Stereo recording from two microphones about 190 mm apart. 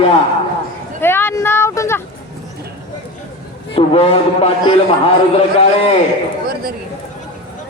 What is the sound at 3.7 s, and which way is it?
Speech, 30° left (ahead or behind).